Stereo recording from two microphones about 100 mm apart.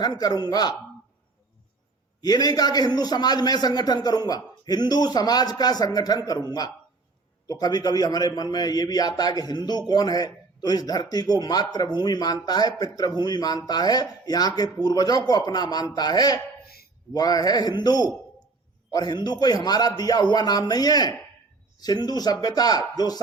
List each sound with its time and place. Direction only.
0.0 s speech: 45° left (ahead or behind)
2.2 s a man's voice: 40° left (ahead or behind)